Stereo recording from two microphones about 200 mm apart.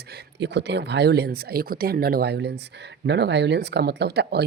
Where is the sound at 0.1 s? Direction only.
55° right (ahead or behind).